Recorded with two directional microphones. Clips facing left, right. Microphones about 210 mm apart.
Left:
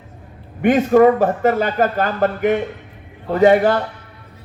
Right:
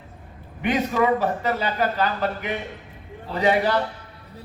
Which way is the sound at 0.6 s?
50° left (ahead or behind).